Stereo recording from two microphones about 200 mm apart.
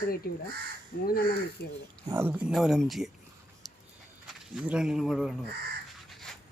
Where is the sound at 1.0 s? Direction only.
50° left (ahead or behind).